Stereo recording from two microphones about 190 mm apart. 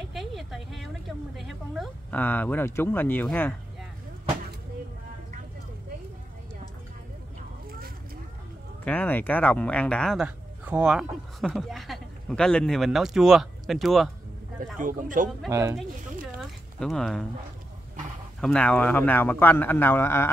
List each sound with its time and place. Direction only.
0.1 s a sound: centre (ahead or behind)
1.3 s speech: centre (ahead or behind)
8.8 s speech: 10° left (ahead or behind)
14.8 s speech: 45° right (ahead or behind)
16.3 s a sound: centre (ahead or behind)
18.4 s speech: 5° left (ahead or behind)